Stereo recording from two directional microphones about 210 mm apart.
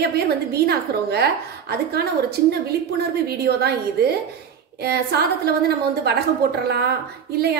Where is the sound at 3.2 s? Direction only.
50° right (ahead or behind).